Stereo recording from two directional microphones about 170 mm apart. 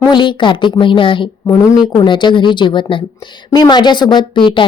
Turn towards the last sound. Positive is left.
turn(degrees=30)  # may be behind; listen again after turning